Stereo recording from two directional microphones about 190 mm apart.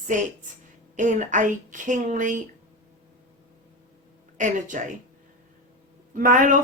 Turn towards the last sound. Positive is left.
turn(degrees=-45)  # may be behind; listen again after turning